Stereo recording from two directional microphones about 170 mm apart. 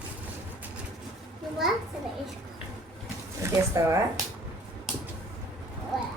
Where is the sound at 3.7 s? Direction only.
15° right (ahead or behind).